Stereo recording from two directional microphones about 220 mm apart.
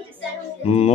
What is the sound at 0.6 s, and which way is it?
Music, 30° left (ahead or behind).